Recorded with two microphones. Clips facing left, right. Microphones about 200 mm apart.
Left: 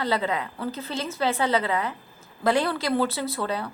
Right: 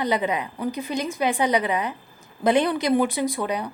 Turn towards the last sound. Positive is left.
turn(degrees=-15)  # may be behind; listen again after turning